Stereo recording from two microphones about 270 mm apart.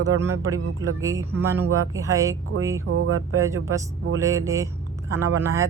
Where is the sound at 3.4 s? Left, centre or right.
Centre.